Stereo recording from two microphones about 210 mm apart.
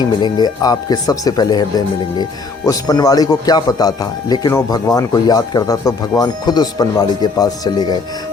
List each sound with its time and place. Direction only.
0.0 s speech: 20° left (ahead or behind)